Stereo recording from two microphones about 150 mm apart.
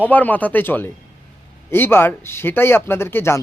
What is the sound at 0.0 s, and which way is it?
Speech, 10° left (ahead or behind).